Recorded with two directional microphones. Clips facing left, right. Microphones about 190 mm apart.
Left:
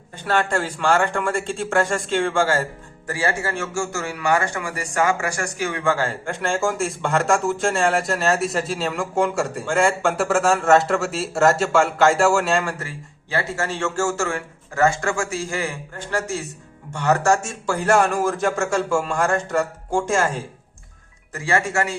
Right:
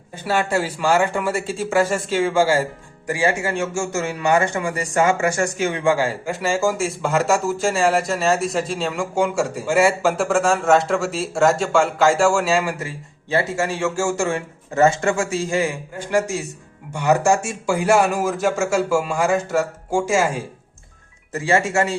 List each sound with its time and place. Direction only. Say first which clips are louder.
0.3 s a man's voice: right 1 dB; 10° right (ahead or behind)
13.3 s a man's voice: right 4 dB; 20° right (ahead or behind)
21.3 s speech: right 3 dB; 25° right (ahead or behind)